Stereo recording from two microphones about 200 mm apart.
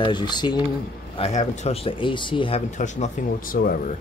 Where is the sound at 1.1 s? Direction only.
30° left (ahead or behind).